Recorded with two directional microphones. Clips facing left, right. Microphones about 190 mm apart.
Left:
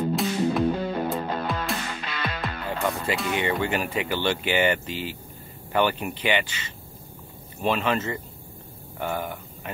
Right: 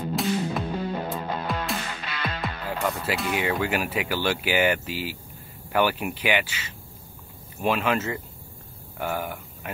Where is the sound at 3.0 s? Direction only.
5° right (ahead or behind).